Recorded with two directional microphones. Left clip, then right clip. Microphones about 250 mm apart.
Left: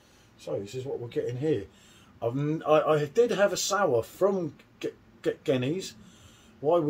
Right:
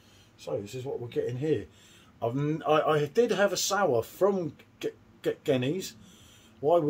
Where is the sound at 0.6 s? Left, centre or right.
Centre.